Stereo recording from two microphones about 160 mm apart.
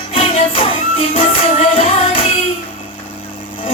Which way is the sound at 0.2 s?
35° left (ahead or behind).